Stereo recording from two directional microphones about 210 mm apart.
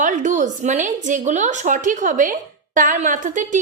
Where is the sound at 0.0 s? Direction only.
35° right (ahead or behind).